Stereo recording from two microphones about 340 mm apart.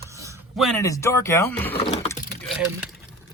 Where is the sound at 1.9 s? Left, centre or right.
Centre.